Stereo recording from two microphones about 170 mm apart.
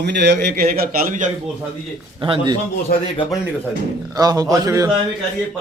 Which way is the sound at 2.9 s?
65° left (ahead or behind).